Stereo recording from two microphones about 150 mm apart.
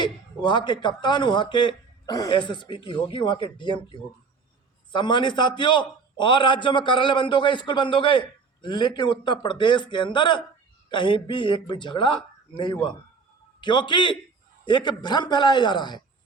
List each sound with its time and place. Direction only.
0.0 s a man's voice: 30° left (ahead or behind)
4.9 s a man's voice: 30° left (ahead or behind)